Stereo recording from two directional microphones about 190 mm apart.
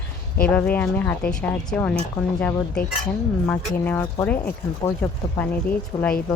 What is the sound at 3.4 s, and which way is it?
Speech, 10° left (ahead or behind).